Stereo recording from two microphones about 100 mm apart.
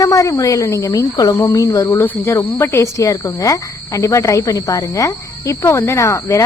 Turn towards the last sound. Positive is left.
turn(degrees=30)  # may be behind; listen again after turning